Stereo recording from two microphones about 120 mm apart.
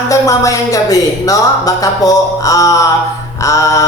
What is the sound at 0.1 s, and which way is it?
Speech, 30° left (ahead or behind).